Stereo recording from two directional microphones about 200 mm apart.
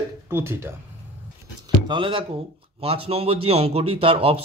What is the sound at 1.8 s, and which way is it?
Speech, 25° right (ahead or behind).